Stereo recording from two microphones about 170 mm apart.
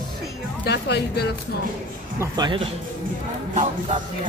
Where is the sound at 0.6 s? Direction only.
75° left (ahead or behind).